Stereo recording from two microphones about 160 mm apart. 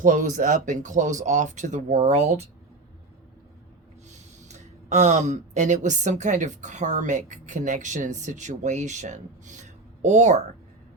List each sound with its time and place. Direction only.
0.0 s a woman's voice: 55° right (ahead or behind)
4.4 s a woman's voice: 45° right (ahead or behind)